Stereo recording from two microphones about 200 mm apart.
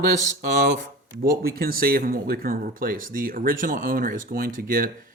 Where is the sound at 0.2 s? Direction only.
40° right (ahead or behind).